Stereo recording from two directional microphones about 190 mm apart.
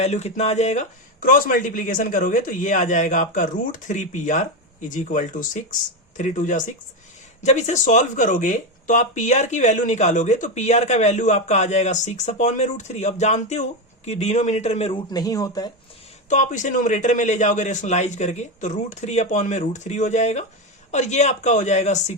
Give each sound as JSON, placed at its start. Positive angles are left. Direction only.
{"t": 0.0, "sound": "speech", "side_deg": 35}
{"t": 16.3, "sound": "speech", "side_deg": 40}